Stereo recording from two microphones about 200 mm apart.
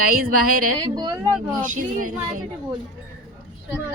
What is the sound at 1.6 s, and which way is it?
Speech, 40° right (ahead or behind).